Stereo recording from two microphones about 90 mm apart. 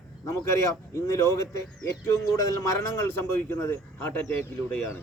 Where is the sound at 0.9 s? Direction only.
35° left (ahead or behind).